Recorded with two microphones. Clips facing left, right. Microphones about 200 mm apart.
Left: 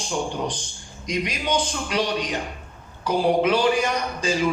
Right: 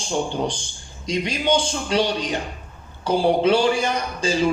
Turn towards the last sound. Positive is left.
turn(degrees=-30)  # may be behind; listen again after turning